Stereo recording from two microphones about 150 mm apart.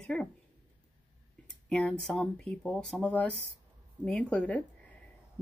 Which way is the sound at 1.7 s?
5° left (ahead or behind).